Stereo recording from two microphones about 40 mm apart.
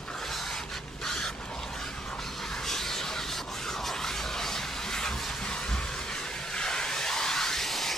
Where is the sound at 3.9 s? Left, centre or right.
Centre.